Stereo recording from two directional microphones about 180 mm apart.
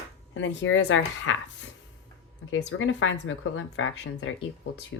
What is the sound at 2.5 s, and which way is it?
Speech, 90° left.